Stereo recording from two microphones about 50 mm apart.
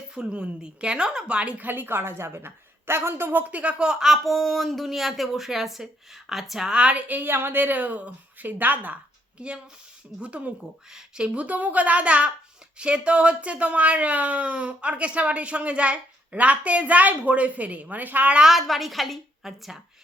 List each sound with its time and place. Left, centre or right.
0.1 s speech: centre
1.6 s a woman's voice: right
3.4 s speech: right; by 4.2 s centre
4.2 s speech: centre
6.7 s speech: right
7.1 s speech: right
9.4 s speech: right
18.5 s speech: centre